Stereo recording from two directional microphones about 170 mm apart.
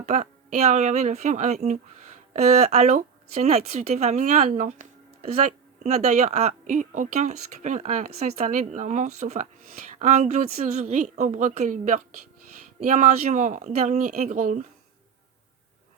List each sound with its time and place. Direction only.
0.0 s speech: 40° right (ahead or behind)